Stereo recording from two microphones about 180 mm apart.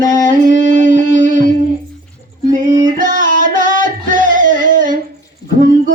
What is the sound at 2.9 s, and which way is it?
Music, 45° right (ahead or behind).